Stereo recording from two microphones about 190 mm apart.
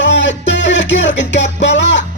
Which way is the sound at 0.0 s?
70° left (ahead or behind).